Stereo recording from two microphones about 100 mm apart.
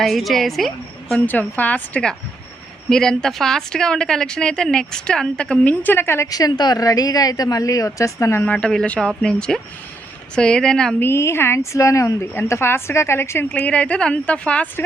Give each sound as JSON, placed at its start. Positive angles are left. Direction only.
{"t": 0.0, "sound": "a woman's voice", "side_deg": 0}
{"t": 1.3, "sound": "a woman's voice", "side_deg": 15}
{"t": 6.3, "sound": "a woman's voice", "side_deg": 40}
{"t": 8.4, "sound": "a woman's voice", "side_deg": 10}
{"t": 11.0, "sound": "a woman's voice", "side_deg": 25}
{"t": 13.5, "sound": "a woman's voice", "side_deg": 10}